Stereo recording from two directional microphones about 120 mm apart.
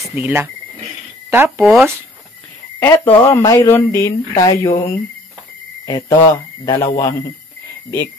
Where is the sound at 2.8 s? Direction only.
20° left (ahead or behind).